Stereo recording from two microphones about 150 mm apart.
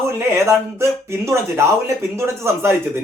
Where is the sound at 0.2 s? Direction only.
20° right (ahead or behind).